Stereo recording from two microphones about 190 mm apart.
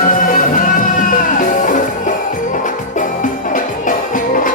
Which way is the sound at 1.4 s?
45° left (ahead or behind).